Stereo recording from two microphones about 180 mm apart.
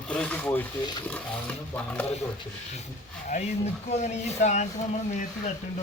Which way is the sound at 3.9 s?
40° left (ahead or behind).